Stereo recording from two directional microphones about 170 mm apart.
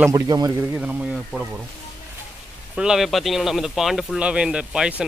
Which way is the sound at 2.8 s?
Centre (ahead or behind).